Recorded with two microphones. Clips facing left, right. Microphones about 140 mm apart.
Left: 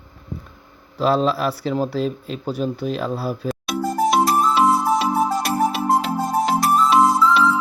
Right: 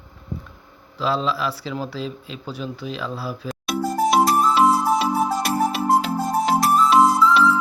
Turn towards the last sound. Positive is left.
turn(degrees=0)  # may be behind; listen again after turning